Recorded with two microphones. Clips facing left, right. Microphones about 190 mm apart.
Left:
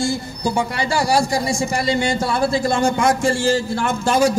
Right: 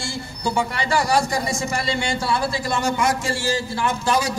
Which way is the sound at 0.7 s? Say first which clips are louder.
Left 2 dB; 30° left (ahead or behind).